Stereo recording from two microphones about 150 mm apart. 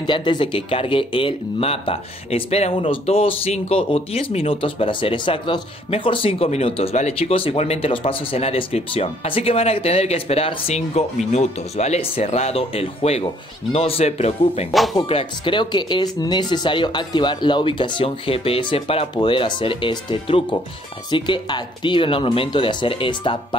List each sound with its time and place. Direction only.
0.0 s a man's voice: 30° left (ahead or behind)